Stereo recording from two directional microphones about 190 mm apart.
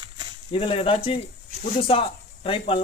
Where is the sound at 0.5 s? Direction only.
30° left (ahead or behind).